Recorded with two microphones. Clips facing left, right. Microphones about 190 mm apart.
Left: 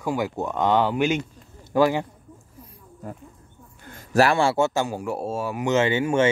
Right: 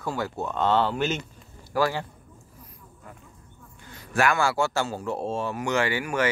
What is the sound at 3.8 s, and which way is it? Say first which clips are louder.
Speech: left 5 dB; 50° left (ahead or behind).